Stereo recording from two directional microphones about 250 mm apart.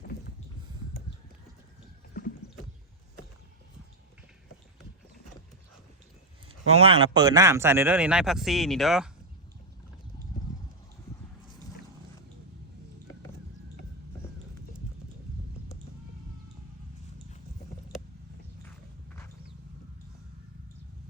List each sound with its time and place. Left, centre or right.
6.7 s speech: right; by 9.0 s centre